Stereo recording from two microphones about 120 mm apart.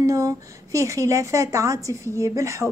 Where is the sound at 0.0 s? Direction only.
25° right (ahead or behind).